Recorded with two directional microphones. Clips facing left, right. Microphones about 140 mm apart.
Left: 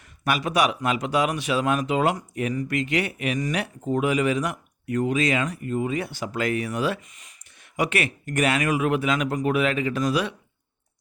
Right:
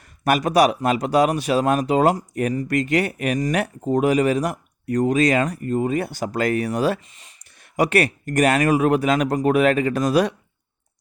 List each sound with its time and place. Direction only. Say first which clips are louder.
0.0 s speech: right 6 dB; 45° right (ahead or behind)